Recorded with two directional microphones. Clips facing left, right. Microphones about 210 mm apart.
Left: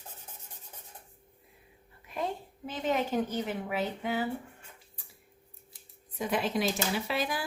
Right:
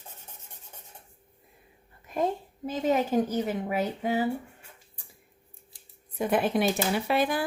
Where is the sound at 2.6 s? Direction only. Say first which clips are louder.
Right 5 dB; 40° right (ahead or behind).